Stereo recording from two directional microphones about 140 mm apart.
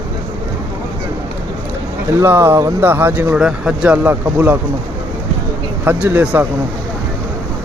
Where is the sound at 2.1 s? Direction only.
20° right (ahead or behind).